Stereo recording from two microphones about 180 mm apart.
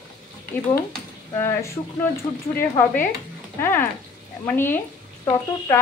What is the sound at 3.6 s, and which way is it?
Speech, 15° left (ahead or behind).